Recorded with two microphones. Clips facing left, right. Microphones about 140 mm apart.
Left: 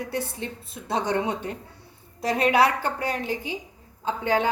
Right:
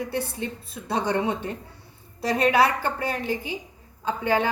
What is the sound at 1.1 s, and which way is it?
A woman's voice, 10° left (ahead or behind).